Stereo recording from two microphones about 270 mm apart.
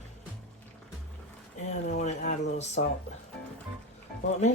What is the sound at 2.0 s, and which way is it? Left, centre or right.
Speech, left.